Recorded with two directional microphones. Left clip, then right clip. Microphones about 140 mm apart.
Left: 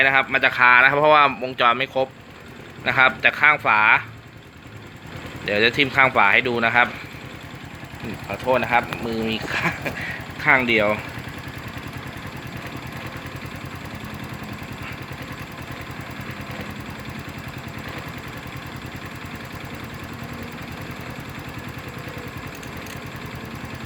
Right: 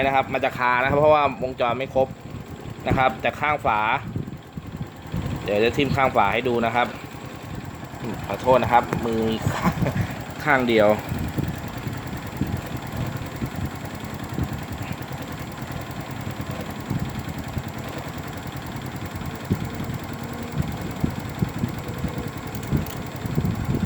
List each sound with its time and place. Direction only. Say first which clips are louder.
0.0 s speech: left 4 dB; 5° right (ahead or behind)
5.5 s speech: left 2 dB; 10° right (ahead or behind)
8.3 s speech: right 2 dB; 15° right (ahead or behind)
10.7 s speech: right 1 dB; 35° right (ahead or behind)